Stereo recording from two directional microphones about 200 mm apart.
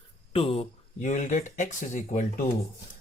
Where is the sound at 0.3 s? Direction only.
30° left (ahead or behind).